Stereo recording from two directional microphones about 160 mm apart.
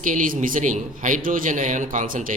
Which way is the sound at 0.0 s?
55° right (ahead or behind).